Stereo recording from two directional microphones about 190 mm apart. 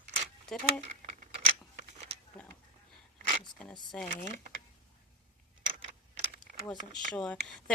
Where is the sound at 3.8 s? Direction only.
Centre (ahead or behind).